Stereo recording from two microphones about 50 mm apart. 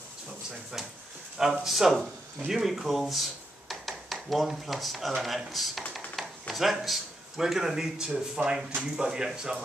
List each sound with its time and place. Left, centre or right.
0.5 s speech: centre
5.9 s a sound: centre
8.2 s speech: centre